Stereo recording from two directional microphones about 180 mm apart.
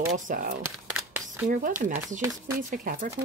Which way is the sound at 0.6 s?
10° right (ahead or behind).